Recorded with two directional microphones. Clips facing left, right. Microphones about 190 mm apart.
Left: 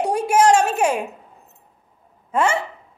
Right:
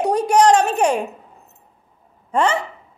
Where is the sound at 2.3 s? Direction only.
5° left (ahead or behind).